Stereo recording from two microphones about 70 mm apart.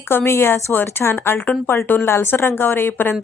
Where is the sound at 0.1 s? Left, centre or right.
Left.